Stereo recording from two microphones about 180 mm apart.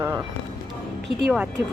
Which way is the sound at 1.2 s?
5° right (ahead or behind).